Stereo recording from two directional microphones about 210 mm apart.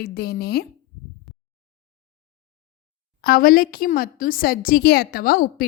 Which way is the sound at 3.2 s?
45° left (ahead or behind).